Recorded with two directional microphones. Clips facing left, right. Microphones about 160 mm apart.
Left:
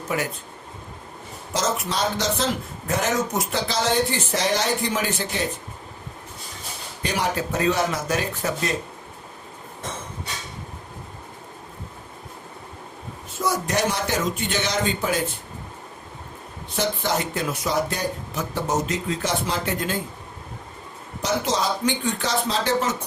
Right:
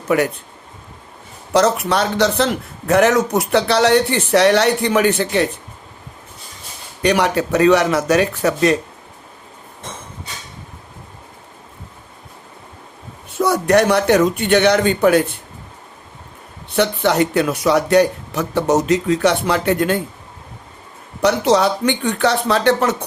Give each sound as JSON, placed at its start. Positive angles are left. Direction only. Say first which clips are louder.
{"t": 0.1, "sound": "a man's voice", "louder": "right 10 dB", "side_deg": -65}
{"t": 1.5, "sound": "a man's voice", "louder": "right 10 dB", "side_deg": -65}
{"t": 7.0, "sound": "a man's voice", "louder": "right 9 dB", "side_deg": -75}
{"t": 13.4, "sound": "a man's voice", "louder": "right 9 dB", "side_deg": -65}
{"t": 16.7, "sound": "a man's voice", "louder": "right 8 dB", "side_deg": -65}
{"t": 21.2, "sound": "a man's voice", "louder": "right 9 dB", "side_deg": -70}